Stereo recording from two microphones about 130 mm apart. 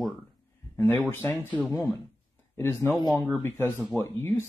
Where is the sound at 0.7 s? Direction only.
15° left (ahead or behind).